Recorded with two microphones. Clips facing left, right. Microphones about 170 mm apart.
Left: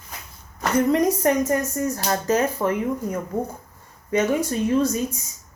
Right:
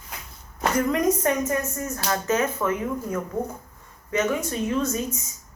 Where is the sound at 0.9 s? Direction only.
35° left (ahead or behind).